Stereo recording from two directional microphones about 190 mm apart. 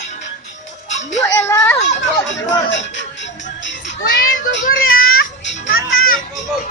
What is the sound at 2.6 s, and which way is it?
Music, 70° left (ahead or behind).